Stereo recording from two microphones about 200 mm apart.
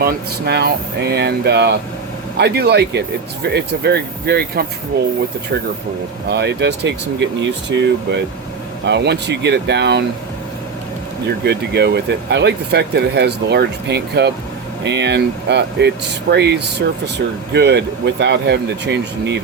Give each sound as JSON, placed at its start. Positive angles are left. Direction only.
{"t": 0.0, "sound": "speech", "side_deg": -55}
{"t": 6.3, "sound": "speech", "side_deg": -60}
{"t": 11.4, "sound": "speech", "side_deg": -55}